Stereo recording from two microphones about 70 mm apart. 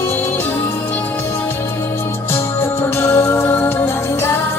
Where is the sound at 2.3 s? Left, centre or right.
Left.